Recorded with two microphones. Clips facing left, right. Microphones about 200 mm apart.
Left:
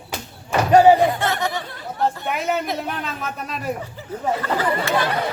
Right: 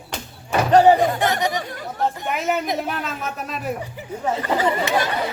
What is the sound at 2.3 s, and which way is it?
Speech, centre (ahead or behind).